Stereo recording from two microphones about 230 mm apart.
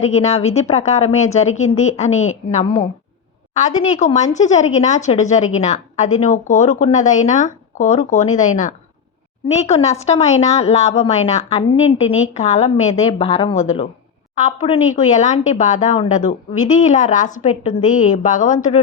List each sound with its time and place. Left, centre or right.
0.1 s a woman's voice: left
1.5 s a woman's voice: left
2.0 s a woman's voice: left